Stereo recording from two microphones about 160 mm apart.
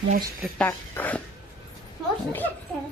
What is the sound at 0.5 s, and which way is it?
Speech, 10° left (ahead or behind).